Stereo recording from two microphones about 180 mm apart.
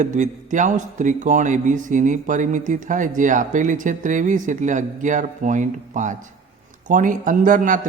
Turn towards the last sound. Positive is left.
turn(degrees=-45)  # may be behind; listen again after turning